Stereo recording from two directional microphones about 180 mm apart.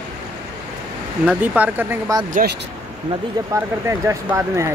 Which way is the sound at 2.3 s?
55° right (ahead or behind).